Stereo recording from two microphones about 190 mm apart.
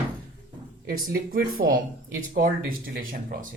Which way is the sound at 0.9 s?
55° right (ahead or behind).